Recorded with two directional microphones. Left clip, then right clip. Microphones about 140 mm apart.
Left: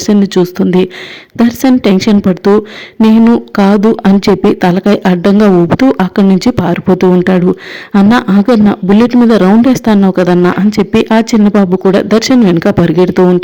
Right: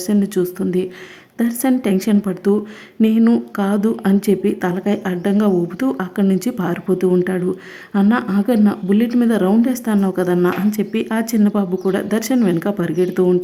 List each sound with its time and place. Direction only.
0.0 s a woman's voice: 35° left (ahead or behind)
3.0 s a woman's voice: 45° left (ahead or behind)